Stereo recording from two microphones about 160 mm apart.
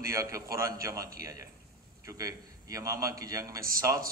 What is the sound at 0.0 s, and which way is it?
Speech, 20° right (ahead or behind).